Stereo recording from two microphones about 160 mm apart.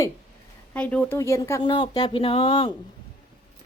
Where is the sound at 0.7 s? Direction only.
10° left (ahead or behind).